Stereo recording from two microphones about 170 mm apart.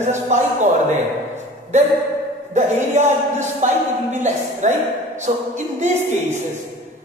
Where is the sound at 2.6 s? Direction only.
45° right (ahead or behind).